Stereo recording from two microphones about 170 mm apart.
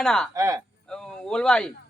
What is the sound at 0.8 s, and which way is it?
Speech, 5° left (ahead or behind).